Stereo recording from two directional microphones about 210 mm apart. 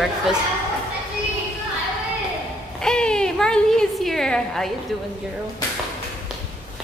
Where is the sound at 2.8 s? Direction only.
5° left (ahead or behind).